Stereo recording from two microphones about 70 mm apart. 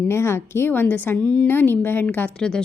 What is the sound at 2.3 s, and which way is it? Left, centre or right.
Speech, centre.